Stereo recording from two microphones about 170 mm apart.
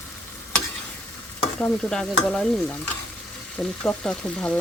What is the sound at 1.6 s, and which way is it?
Speech, 5° left (ahead or behind).